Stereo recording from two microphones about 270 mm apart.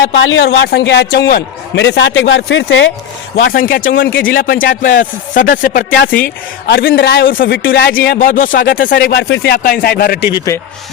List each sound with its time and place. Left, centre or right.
0.3 s a man's voice: left
3.4 s a man's voice: left